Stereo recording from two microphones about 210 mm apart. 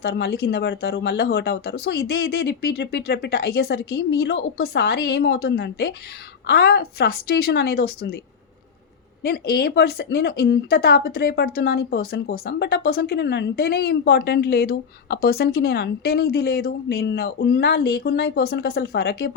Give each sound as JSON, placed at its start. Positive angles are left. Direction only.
{"t": 0.0, "sound": "speech", "side_deg": 50}
{"t": 9.2, "sound": "speech", "side_deg": 45}